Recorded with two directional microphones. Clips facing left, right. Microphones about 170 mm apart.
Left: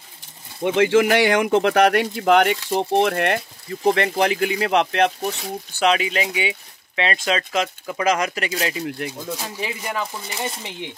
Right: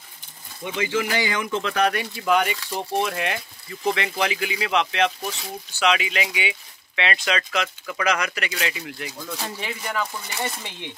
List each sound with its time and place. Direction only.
0.6 s speech: 60° left (ahead or behind)
9.1 s speech: 20° left (ahead or behind)